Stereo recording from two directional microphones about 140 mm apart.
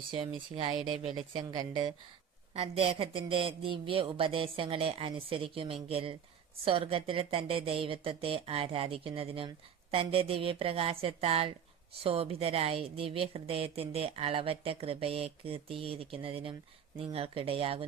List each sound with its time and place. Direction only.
0.1 s speech: 35° right (ahead or behind)
2.6 s a woman's voice: 45° right (ahead or behind)